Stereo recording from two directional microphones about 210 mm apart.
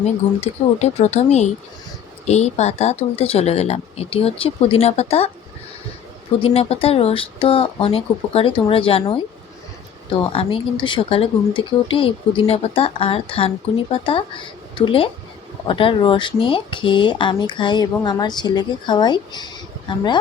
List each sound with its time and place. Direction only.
0.3 s speech: 30° left (ahead or behind)
6.4 s speech: 30° left (ahead or behind)
10.3 s speech: 25° left (ahead or behind)